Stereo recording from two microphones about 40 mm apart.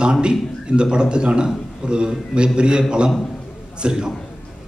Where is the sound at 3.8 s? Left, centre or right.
Centre.